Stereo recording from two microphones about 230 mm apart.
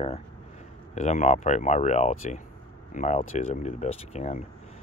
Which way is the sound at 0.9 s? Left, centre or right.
Left.